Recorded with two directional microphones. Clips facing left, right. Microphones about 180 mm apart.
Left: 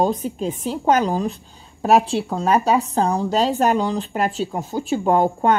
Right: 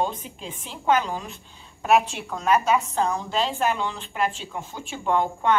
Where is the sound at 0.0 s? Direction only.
40° left (ahead or behind).